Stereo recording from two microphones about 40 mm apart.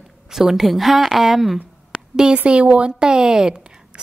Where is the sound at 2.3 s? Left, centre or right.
Right.